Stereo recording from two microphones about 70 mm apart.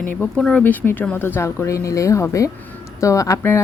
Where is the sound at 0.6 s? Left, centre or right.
Left.